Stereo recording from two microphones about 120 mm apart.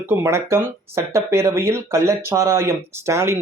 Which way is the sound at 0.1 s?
20° right (ahead or behind).